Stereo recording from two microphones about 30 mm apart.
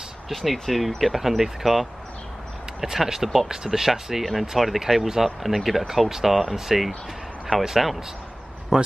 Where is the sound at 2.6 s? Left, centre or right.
Centre.